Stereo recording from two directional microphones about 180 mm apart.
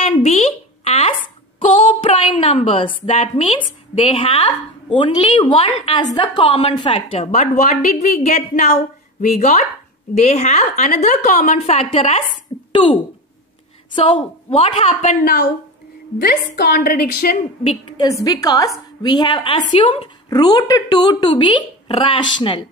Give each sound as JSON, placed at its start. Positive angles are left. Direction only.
{"t": 0.2, "sound": "a sound", "side_deg": 35}
{"t": 3.1, "sound": "speech", "side_deg": 35}
{"t": 7.1, "sound": "a woman's voice", "side_deg": 40}
{"t": 16.2, "sound": "a woman's voice", "side_deg": 60}
{"t": 17.6, "sound": "a woman's voice", "side_deg": 25}